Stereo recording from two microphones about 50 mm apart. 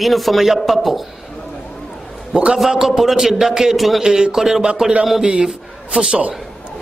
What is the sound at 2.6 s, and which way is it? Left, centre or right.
A man's voice, centre.